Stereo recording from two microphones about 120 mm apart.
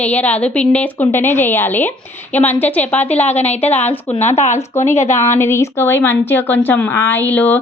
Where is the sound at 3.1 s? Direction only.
65° left (ahead or behind).